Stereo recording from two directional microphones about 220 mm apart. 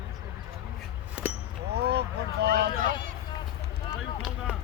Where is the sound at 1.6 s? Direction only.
45° right (ahead or behind).